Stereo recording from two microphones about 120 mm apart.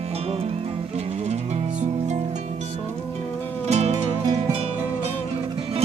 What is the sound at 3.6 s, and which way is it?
Music, 65° right (ahead or behind).